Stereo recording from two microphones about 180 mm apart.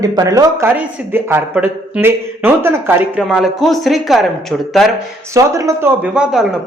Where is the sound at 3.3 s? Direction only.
Centre (ahead or behind).